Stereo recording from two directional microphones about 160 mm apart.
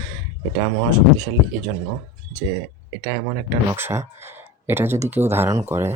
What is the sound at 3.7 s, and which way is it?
Speech, 15° right (ahead or behind).